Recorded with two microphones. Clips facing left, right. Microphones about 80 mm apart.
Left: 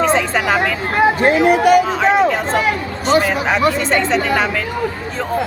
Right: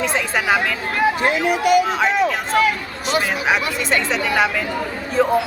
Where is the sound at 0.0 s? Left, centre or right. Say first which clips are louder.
Left 5 dB; centre.